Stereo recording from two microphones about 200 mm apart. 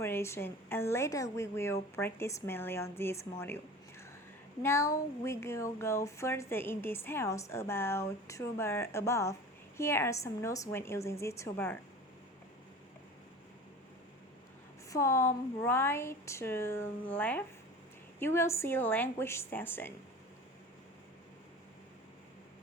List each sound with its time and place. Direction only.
0.0 s speech: 10° left (ahead or behind)
14.8 s speech: 15° left (ahead or behind)